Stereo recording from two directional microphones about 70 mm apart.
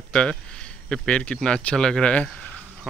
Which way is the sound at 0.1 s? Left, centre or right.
Centre.